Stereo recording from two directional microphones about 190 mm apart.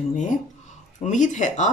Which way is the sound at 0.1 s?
40° left (ahead or behind).